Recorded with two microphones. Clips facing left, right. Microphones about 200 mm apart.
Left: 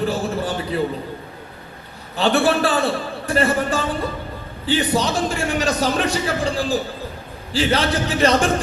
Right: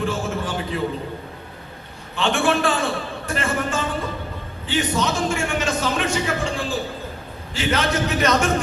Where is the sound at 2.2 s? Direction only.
35° left (ahead or behind).